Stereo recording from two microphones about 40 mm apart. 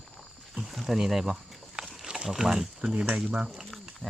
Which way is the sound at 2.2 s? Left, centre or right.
Centre.